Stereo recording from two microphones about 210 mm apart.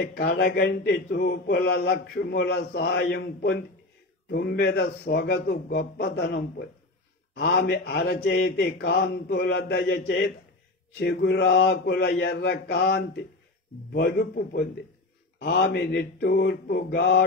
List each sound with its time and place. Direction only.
0.0 s speech: 45° left (ahead or behind)
11.0 s mantra: 50° left (ahead or behind)
13.9 s speech: 45° left (ahead or behind)